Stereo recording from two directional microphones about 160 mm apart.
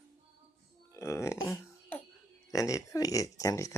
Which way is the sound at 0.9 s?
15° left (ahead or behind).